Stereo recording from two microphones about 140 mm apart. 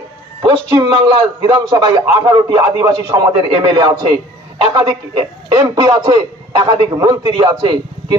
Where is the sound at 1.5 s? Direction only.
30° right (ahead or behind).